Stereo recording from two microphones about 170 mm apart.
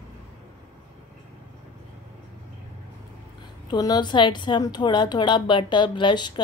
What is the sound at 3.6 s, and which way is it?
A woman's voice, 25° left (ahead or behind).